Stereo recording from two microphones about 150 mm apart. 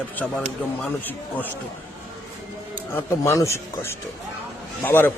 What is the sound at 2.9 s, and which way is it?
Speech, 20° left (ahead or behind).